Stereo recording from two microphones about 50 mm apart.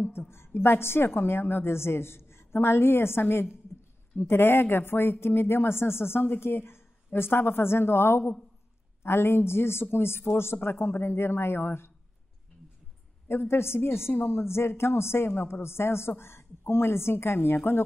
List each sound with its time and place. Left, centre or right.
0.3 s speech: left
13.3 s speech: left